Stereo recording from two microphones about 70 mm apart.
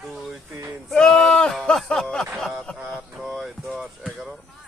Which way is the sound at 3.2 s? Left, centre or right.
Centre.